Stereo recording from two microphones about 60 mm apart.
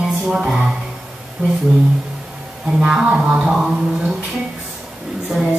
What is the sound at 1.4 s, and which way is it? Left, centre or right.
Speech, centre.